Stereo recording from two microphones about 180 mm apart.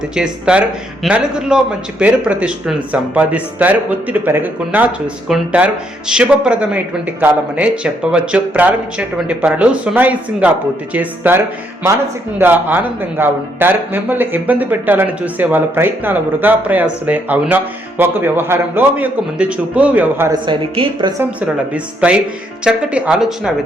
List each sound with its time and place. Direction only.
0.1 s a man's voice: 5° right (ahead or behind)
20.4 s a woman's voice: 25° right (ahead or behind)
21.2 s a man's voice: 5° right (ahead or behind)